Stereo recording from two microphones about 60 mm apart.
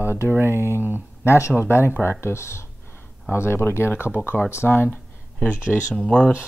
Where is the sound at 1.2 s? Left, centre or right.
Left.